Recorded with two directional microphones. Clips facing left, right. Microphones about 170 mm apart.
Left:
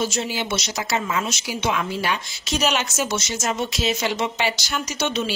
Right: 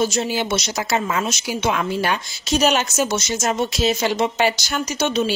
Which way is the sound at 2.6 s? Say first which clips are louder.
Right 4 dB; 40° right (ahead or behind).